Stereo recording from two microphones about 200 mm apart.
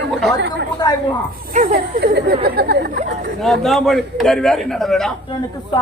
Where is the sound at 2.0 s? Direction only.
55° right (ahead or behind).